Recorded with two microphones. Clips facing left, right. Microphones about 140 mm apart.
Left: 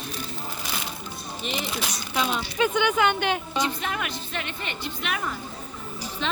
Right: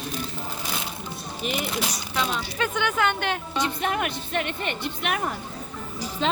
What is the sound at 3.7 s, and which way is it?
Speech, 50° right (ahead or behind).